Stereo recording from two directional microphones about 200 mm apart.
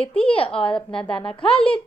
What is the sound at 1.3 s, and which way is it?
Speech, 25° left (ahead or behind).